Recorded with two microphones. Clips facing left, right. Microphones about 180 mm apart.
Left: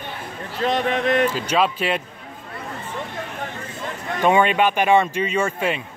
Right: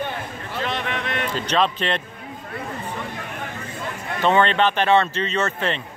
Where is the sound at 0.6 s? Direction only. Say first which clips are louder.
Left 6 dB; 40° left (ahead or behind).